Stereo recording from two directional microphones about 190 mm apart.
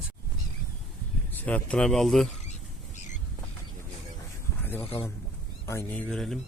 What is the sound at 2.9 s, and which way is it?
Squawk, 40° left (ahead or behind).